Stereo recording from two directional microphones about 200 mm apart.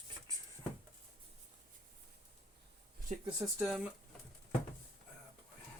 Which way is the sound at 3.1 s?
40° right (ahead or behind).